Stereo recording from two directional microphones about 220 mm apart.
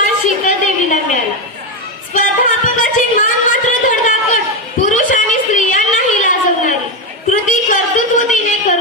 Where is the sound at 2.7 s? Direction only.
35° left (ahead or behind).